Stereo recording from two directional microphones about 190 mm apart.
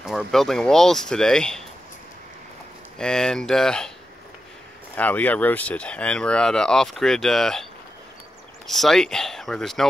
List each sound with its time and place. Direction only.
0.0 s speech: centre (ahead or behind)
3.0 s speech: 5° left (ahead or behind)
4.9 s speech: 10° left (ahead or behind)
8.6 s speech: centre (ahead or behind)